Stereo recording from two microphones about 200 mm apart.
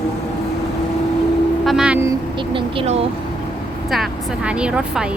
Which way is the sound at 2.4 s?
25° right (ahead or behind).